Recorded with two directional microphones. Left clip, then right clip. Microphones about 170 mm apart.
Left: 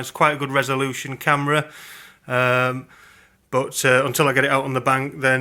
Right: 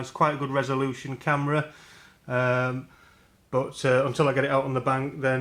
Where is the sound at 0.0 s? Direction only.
20° left (ahead or behind).